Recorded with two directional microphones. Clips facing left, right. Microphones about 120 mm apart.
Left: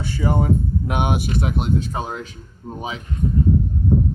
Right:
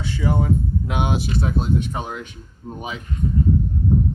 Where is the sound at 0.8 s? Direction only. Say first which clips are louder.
Left 2 dB; 55° left (ahead or behind).